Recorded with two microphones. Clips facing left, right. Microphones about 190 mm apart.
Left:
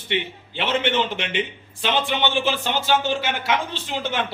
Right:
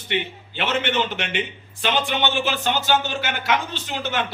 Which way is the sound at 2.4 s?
30° left (ahead or behind).